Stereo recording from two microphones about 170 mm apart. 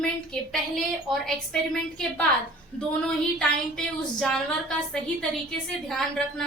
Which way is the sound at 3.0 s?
5° left (ahead or behind).